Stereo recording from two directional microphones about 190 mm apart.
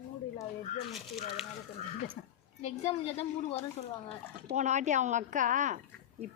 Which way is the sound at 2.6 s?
35° left (ahead or behind).